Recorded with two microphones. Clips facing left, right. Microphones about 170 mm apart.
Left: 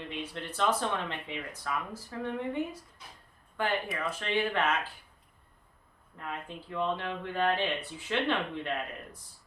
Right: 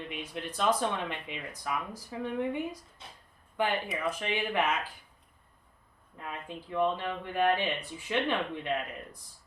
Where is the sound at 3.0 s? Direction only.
25° right (ahead or behind).